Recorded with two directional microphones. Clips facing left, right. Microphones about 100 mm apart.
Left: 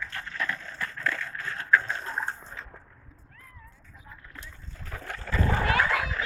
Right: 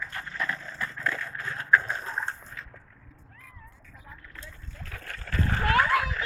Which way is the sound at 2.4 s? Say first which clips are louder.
Left 1 dB; 30° left (ahead or behind).